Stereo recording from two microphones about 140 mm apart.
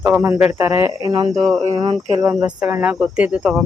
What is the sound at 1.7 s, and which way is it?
Speech, 25° right (ahead or behind).